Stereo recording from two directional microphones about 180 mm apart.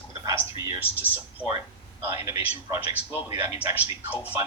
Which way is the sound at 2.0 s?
15° right (ahead or behind).